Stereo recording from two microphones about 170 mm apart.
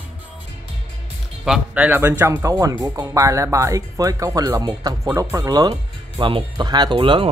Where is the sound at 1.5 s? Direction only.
10° right (ahead or behind); by 7.3 s 30° right (ahead or behind).